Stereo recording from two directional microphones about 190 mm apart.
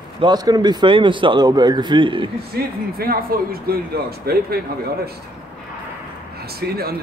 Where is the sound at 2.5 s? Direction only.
55° right (ahead or behind).